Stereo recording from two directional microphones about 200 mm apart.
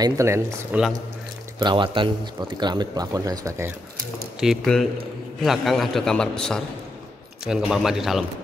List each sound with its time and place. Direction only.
0.0 s speech: 15° right (ahead or behind)
1.6 s speech: 25° right (ahead or behind)
4.4 s a man's voice: centre (ahead or behind)